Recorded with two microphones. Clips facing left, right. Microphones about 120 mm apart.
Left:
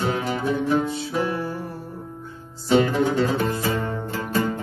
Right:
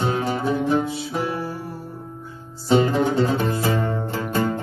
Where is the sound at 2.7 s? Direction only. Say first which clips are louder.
Right 1 dB; 35° right (ahead or behind).